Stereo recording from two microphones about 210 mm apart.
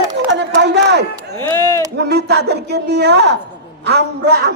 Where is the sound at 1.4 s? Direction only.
10° left (ahead or behind).